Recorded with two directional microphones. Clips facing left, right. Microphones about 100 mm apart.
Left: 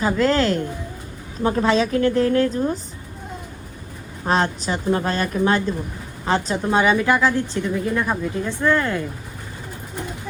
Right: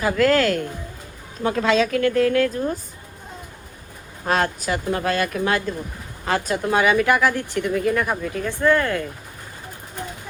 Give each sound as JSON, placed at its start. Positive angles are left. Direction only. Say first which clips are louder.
{"t": 0.0, "sound": "a woman's voice", "louder": "right 1 dB", "side_deg": 25}
{"t": 1.5, "sound": "a woman's voice", "louder": "left 1 dB", "side_deg": 30}
{"t": 4.3, "sound": "a woman's voice", "louder": "left 1 dB", "side_deg": 25}